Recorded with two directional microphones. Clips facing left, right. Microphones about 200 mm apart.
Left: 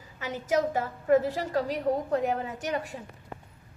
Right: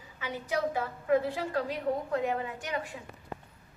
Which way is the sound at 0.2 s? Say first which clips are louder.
Left 5 dB; 45° left (ahead or behind).